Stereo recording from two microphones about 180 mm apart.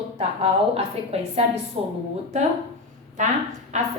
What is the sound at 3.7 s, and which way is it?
Speech, 40° right (ahead or behind).